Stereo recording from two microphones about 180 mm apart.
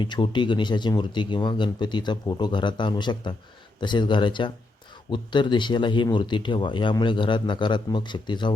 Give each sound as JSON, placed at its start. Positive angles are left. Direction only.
{"t": 0.0, "sound": "speech", "side_deg": 25}